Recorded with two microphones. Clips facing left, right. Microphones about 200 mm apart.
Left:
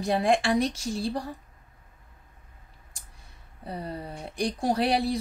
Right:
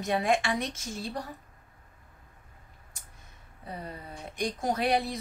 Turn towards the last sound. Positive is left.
turn(degrees=35)  # may be behind; listen again after turning